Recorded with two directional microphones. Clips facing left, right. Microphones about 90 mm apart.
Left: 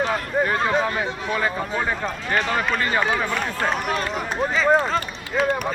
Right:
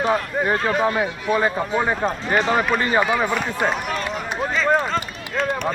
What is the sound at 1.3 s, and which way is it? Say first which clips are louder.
Speech: right 5 dB; 20° right (ahead or behind).